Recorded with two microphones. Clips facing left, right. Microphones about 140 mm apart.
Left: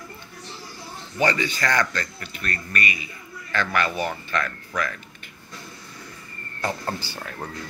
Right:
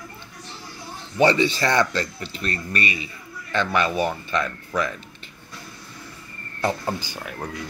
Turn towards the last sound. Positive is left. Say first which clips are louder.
# right 2 dB
turn(degrees=-15)  # may be behind; listen again after turning